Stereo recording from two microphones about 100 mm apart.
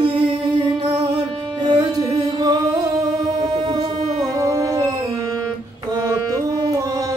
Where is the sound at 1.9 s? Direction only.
40° right (ahead or behind).